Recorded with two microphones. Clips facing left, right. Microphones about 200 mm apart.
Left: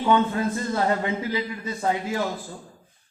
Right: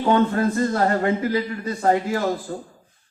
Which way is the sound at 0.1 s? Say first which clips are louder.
Right 3 dB; 50° right (ahead or behind).